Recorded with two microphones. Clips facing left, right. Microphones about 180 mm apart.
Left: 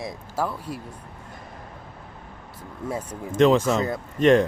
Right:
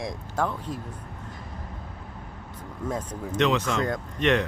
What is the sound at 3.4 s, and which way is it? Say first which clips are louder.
Speech: left 6 dB; 45° left (ahead or behind).